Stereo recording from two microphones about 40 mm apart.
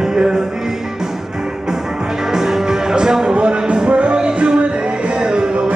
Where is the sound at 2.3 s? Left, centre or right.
Centre.